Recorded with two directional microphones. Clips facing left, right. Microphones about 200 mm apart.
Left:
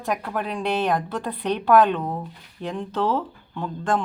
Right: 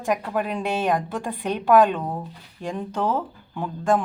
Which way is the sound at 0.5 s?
10° right (ahead or behind).